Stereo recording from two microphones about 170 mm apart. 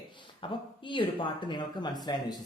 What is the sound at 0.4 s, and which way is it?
Speech, 30° left (ahead or behind).